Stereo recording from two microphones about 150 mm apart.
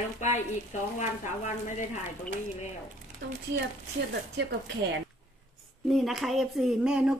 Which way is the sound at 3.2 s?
90° right.